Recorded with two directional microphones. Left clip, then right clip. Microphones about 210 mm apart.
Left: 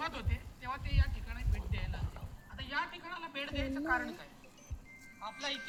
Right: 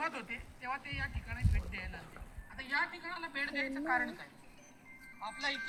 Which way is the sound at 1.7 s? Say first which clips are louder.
Even; 60° left (ahead or behind).